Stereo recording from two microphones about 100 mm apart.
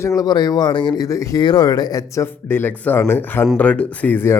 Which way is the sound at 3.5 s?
15° left (ahead or behind).